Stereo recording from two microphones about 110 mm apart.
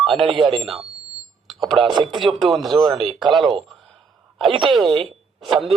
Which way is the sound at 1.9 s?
45° right (ahead or behind).